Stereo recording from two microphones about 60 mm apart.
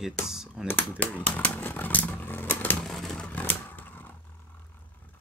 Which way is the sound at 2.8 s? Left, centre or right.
Centre.